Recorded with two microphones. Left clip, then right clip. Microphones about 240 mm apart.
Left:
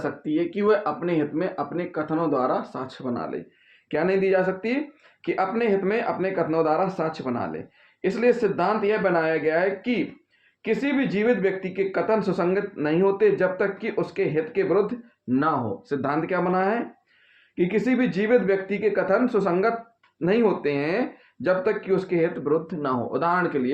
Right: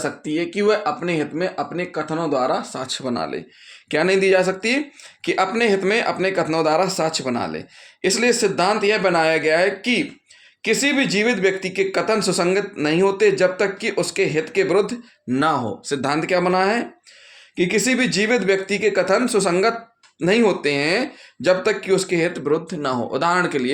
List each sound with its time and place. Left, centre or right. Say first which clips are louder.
0.0 s speech: right 2 dB; right